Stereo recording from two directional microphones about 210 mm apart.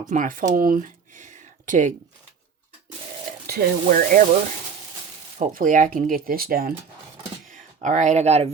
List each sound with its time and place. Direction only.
0.1 s speech: 40° right (ahead or behind)
3.4 s speech: 45° right (ahead or behind)
5.5 s speech: 40° right (ahead or behind)